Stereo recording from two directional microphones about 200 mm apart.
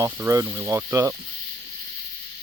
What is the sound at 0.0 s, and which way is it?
Speech, 15° right (ahead or behind).